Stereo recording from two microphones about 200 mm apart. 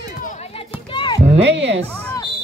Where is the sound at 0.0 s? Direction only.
40° left (ahead or behind).